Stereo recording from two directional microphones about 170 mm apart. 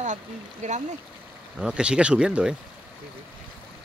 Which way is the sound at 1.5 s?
5° right (ahead or behind).